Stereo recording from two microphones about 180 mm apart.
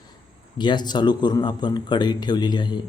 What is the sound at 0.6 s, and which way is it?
Speech, 25° left (ahead or behind).